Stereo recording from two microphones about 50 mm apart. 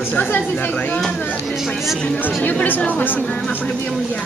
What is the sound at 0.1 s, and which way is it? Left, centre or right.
Speech, left.